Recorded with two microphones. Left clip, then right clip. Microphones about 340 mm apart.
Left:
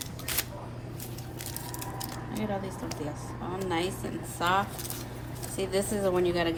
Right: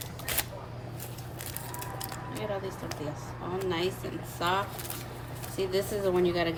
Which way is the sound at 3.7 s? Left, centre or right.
Centre.